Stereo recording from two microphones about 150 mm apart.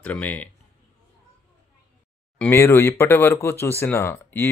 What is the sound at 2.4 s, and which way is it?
Speech, 15° left (ahead or behind).